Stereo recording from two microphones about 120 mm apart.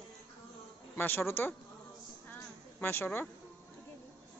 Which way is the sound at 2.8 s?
15° left (ahead or behind).